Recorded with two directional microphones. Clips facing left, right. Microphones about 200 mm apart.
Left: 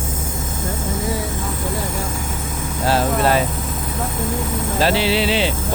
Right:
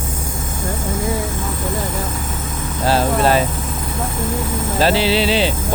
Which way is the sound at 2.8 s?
30° right (ahead or behind).